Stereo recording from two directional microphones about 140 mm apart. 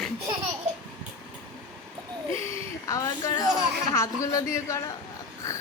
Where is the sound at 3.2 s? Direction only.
25° left (ahead or behind).